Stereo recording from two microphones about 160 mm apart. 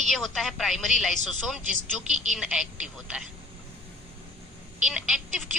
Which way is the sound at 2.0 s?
45° right (ahead or behind).